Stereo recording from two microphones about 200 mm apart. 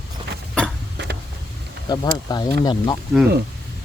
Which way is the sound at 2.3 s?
20° left (ahead or behind).